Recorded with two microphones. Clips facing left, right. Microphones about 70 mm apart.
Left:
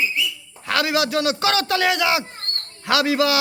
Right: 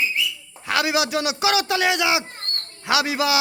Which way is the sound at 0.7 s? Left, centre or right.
Centre.